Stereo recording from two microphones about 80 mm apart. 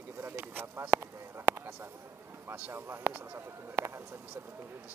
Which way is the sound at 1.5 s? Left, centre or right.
Right.